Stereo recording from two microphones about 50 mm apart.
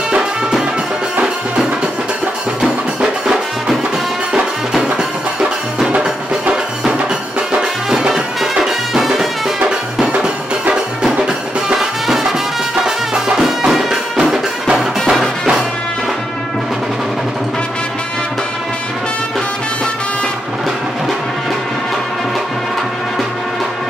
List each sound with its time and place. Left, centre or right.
0.1 s music: centre
2.6 s music: centre
4.8 s music: centre
8.6 s music: centre
9.6 s music: centre